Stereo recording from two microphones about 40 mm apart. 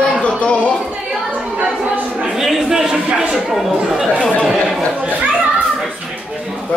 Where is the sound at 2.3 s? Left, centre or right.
Centre.